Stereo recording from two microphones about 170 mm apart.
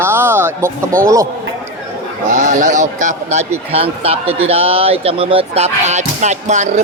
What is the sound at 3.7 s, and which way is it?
A man's voice, 35° right (ahead or behind).